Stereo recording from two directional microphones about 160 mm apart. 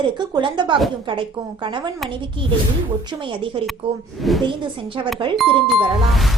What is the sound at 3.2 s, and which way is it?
A woman's voice, 30° right (ahead or behind).